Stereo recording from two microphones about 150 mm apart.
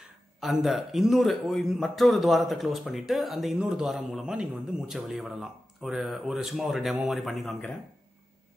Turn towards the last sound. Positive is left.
turn(degrees=0)  # may be behind; listen again after turning